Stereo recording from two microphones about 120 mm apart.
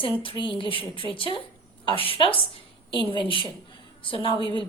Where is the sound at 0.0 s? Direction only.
45° left (ahead or behind).